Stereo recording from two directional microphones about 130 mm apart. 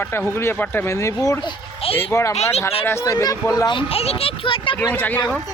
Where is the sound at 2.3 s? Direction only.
55° left (ahead or behind).